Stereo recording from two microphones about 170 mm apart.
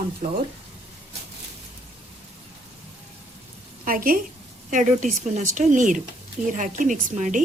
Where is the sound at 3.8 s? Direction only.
55° right (ahead or behind).